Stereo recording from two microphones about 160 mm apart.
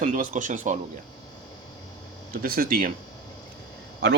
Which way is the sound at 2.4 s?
65° right (ahead or behind).